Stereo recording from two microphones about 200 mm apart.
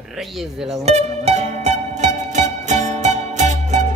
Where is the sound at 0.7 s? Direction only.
35° right (ahead or behind).